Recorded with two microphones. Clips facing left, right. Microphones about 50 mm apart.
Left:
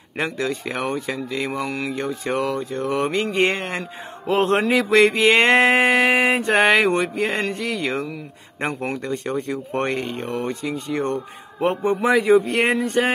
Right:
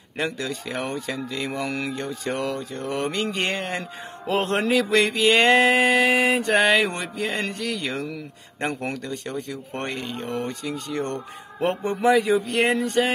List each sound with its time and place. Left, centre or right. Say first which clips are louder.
0.2 s mantra: left 3 dB; left
1.6 s speech: left 2 dB; centre
2.0 s mantra: left 4 dB; centre
9.0 s speech: left 6 dB; left
10.7 s mantra: left 4 dB; left
11.1 s speech: left 2 dB; centre
11.8 s speech: even; left